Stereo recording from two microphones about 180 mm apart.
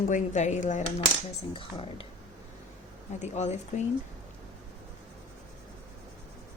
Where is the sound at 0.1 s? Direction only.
40° left (ahead or behind).